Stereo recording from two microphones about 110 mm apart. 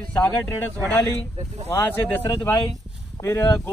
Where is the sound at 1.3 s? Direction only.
90° right.